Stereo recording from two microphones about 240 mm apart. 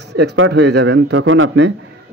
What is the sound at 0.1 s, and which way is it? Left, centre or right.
Speech, right.